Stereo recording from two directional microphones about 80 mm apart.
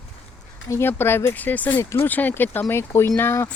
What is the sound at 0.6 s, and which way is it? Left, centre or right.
Speech, left.